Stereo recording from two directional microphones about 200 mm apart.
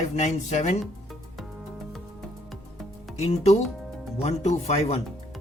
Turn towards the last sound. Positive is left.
turn(degrees=30)  # may be behind; listen again after turning